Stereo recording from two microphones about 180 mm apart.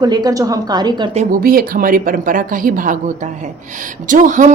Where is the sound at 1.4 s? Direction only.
55° right (ahead or behind).